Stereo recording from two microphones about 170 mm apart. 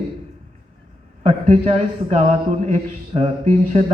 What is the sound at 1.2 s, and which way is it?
A man's voice, 40° right (ahead or behind).